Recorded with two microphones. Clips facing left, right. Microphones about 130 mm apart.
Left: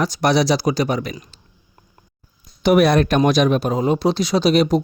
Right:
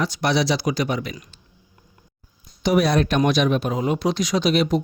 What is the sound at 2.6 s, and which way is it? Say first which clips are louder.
Speech: left 4 dB; 60° left (ahead or behind).